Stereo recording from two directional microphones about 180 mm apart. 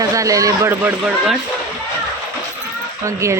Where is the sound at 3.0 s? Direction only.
15° right (ahead or behind).